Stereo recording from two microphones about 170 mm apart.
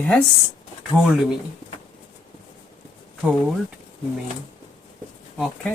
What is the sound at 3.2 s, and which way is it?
Speech, 5° right (ahead or behind).